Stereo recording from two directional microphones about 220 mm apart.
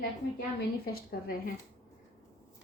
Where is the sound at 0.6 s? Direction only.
45° left (ahead or behind).